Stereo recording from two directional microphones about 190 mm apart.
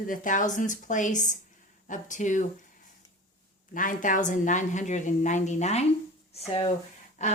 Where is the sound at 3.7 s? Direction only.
45° left (ahead or behind).